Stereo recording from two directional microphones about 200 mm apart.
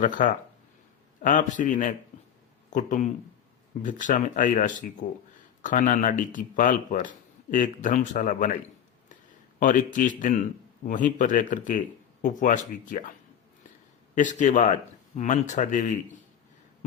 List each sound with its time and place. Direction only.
0.0 s speech: 40° left (ahead or behind)
9.6 s speech: 40° left (ahead or behind)
14.2 s speech: 40° left (ahead or behind)